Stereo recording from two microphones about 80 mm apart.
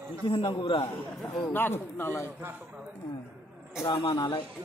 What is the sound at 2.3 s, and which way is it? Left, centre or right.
Speech, right.